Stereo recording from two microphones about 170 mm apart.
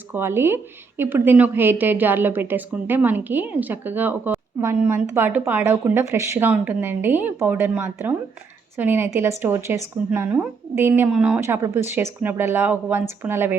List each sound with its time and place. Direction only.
0.1 s a woman's voice: 15° right (ahead or behind)